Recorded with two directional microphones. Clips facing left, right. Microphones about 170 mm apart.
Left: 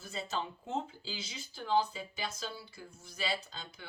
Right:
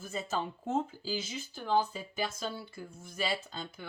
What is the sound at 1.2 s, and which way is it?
Speech, 50° right (ahead or behind).